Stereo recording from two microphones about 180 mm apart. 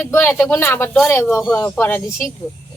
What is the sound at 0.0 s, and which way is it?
A woman's voice, 10° left (ahead or behind).